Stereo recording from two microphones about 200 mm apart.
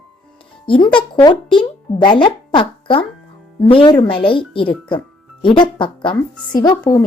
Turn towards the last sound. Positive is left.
turn(degrees=20)  # may be behind; listen again after turning